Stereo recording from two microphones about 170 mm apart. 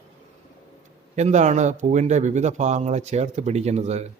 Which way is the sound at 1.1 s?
45° right (ahead or behind).